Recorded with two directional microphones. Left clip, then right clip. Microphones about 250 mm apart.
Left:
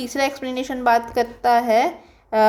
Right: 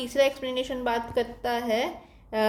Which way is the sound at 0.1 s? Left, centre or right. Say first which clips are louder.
Even; centre.